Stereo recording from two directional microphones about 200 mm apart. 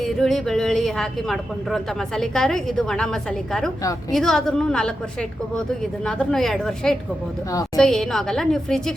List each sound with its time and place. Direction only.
0.0 s a woman's voice: centre (ahead or behind)
6.1 s a woman's voice: 5° left (ahead or behind)